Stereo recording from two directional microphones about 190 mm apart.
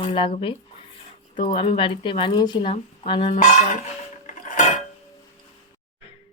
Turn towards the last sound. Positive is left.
turn(degrees=40)  # may be behind; listen again after turning